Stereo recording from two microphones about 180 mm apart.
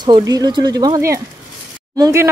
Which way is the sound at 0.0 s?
20° right (ahead or behind).